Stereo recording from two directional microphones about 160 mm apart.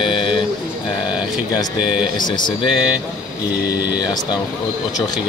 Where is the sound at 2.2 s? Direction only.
30° left (ahead or behind).